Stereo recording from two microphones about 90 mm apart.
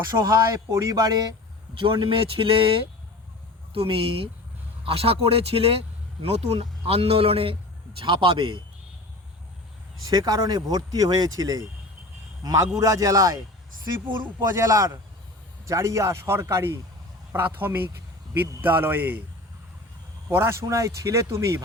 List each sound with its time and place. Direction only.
0.3 s speech: 35° right (ahead or behind)
1.7 s speech: 65° right (ahead or behind)
3.8 s speech: 90° right
6.8 s speech: 90° right
7.9 s speech: 65° right (ahead or behind)
10.1 s speech: 45° right (ahead or behind)
14.1 s speech: 60° right (ahead or behind)
14.5 s speech: 35° right (ahead or behind)
20.3 s speech: 30° right (ahead or behind)